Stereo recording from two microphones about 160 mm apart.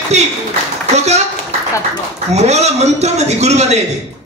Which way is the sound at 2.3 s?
45° right (ahead or behind).